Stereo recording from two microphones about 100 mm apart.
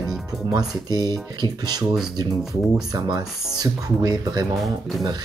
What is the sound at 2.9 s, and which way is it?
Speech, 45° right (ahead or behind).